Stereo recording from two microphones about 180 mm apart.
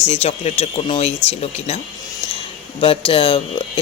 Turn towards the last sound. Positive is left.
turn(degrees=30)  # may be behind; listen again after turning